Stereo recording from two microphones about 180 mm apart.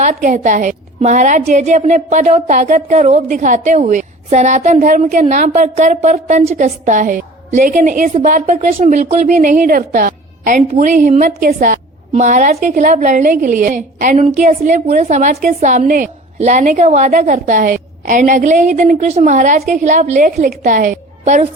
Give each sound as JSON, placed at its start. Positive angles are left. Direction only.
{"t": 0.0, "sound": "a woman's voice", "side_deg": -45}